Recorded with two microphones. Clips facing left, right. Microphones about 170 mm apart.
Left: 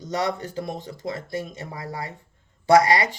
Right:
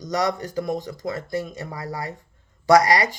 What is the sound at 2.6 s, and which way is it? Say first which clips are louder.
Speech: right 1 dB; 30° left (ahead or behind).